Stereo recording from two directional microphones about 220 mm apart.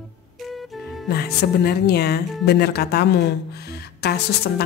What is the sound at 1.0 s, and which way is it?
Speech, 45° left (ahead or behind).